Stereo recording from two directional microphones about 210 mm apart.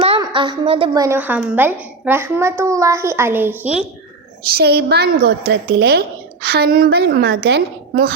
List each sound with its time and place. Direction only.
0.2 s a woman's voice: 20° right (ahead or behind)
1.0 s a woman's voice: 10° right (ahead or behind)
4.5 s a woman's voice: 50° right (ahead or behind)